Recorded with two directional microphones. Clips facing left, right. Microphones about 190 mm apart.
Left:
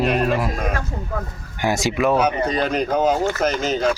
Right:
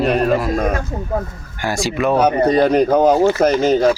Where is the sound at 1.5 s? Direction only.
20° left (ahead or behind).